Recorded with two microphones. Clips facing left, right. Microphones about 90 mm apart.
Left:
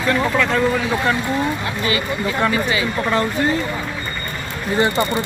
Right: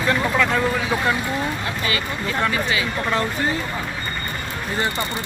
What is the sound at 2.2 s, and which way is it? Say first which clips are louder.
Speech: left 3 dB; 5° left (ahead or behind).